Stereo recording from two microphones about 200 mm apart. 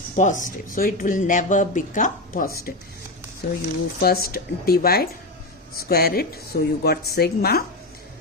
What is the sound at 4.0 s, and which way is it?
Speech, 50° left (ahead or behind).